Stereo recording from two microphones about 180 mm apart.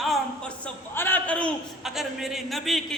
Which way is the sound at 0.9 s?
10° left (ahead or behind).